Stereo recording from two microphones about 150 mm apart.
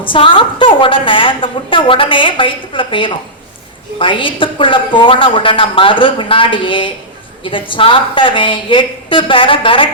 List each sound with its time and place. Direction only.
0.0 s a woman's voice: 35° left (ahead or behind)